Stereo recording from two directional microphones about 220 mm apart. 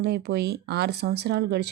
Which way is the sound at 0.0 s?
50° right (ahead or behind).